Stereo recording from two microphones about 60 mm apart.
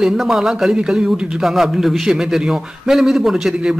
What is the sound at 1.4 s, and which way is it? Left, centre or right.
A man's voice, centre.